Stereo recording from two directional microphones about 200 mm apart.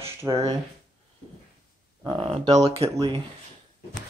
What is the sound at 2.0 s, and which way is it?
Speech, 25° right (ahead or behind).